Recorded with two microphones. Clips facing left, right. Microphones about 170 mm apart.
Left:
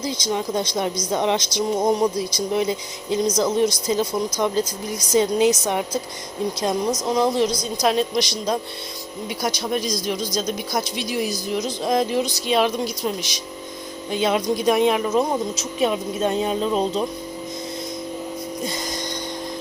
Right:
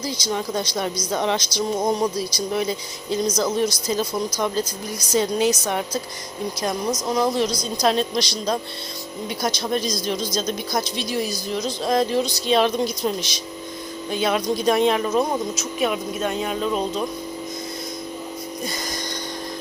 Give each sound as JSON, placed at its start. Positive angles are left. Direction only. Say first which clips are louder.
{"t": 0.0, "sound": "speech", "louder": "left 1 dB", "side_deg": 20}
{"t": 7.0, "sound": "speech", "louder": "left 1 dB", "side_deg": 20}
{"t": 14.1, "sound": "speech", "louder": "left 1 dB", "side_deg": 20}
{"t": 18.6, "sound": "music", "louder": "left 1 dB", "side_deg": 25}